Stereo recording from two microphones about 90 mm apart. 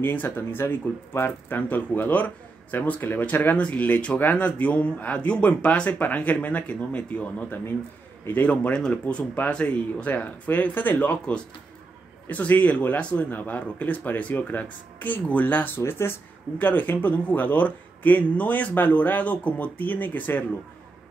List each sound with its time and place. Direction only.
0.0 s speech: 20° left (ahead or behind)